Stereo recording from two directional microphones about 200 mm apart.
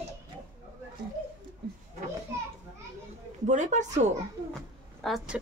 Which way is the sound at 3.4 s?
35° right (ahead or behind).